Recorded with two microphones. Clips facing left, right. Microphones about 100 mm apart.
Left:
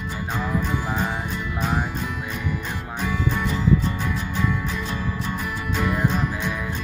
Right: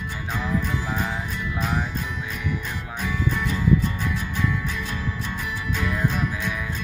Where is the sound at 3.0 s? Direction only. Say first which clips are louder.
Left 1 dB; 15° left (ahead or behind).